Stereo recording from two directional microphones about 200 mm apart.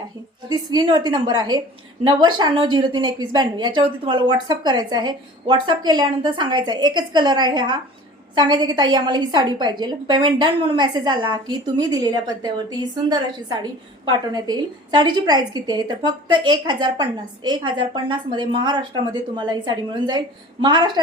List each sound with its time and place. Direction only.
0.4 s a woman's voice: 20° right (ahead or behind)